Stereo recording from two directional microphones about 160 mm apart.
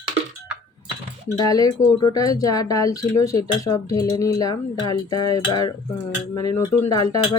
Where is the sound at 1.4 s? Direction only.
20° left (ahead or behind).